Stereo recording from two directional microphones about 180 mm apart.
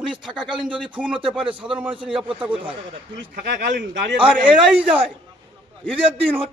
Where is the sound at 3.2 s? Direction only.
80° right.